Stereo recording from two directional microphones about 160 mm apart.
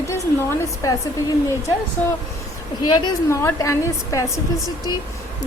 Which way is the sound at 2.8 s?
25° left (ahead or behind).